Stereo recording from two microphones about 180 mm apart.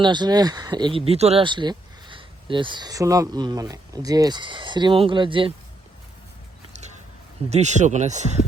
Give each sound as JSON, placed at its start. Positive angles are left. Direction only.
{"t": 0.0, "sound": "speech", "side_deg": -25}
{"t": 7.5, "sound": "speech", "side_deg": -40}